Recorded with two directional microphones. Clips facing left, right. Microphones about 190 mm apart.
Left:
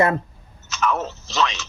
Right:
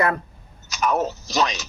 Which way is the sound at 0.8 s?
40° right (ahead or behind).